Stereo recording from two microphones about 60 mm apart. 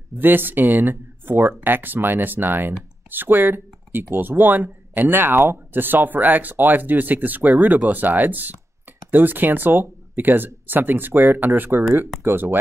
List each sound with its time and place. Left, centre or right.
0.2 s speech: right